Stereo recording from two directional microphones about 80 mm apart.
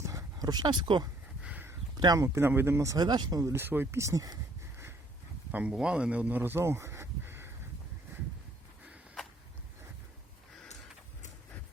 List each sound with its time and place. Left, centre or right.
0.0 s a sound: right
1.4 s a sound: centre
2.1 s speech: right
2.4 s speech: right
2.7 s speech: right
3.0 s speech: right
3.5 s speech: right
4.0 s speech: right
5.5 s speech: centre